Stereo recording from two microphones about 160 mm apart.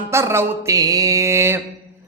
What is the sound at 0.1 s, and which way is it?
Speech, 15° right (ahead or behind).